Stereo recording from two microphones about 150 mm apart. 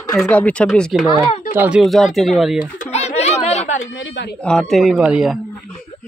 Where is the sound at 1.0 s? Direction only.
25° right (ahead or behind).